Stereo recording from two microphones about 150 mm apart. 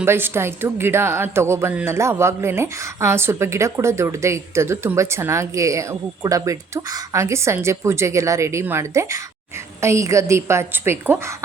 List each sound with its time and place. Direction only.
0.0 s speech: 15° right (ahead or behind)